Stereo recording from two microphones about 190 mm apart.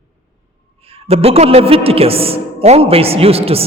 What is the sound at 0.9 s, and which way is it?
A man's voice, 30° right (ahead or behind).